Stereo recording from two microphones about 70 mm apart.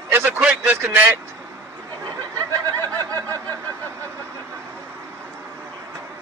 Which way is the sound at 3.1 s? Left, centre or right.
Left.